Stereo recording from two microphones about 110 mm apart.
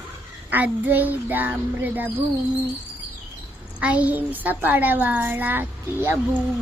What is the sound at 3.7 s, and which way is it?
A child's voice, 10° right (ahead or behind).